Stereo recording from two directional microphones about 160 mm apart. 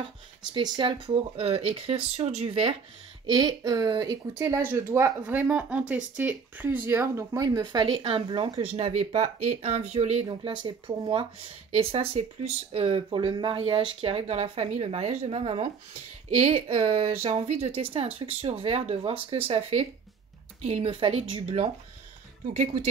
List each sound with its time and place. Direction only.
0.0 s speech: 30° right (ahead or behind)
3.3 s a woman's voice: 25° right (ahead or behind); by 10.2 s 45° right (ahead or behind)
10.2 s speech: 30° right (ahead or behind)